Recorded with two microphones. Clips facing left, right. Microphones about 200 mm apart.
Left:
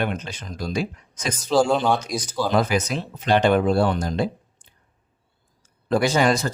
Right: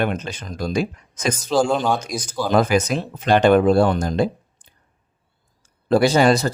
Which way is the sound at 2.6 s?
50° right (ahead or behind).